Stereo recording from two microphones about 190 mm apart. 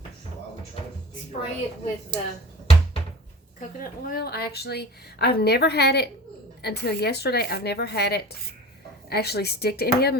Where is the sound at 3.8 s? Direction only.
50° left (ahead or behind).